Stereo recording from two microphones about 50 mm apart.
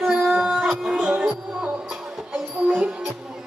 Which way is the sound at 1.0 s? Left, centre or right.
Right.